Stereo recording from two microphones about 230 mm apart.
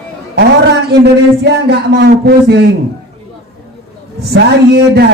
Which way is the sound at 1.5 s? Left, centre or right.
Right.